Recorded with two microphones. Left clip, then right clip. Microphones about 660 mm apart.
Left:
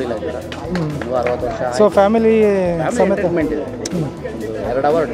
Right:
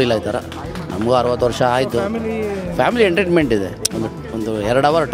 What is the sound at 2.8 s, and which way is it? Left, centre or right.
Speech, right.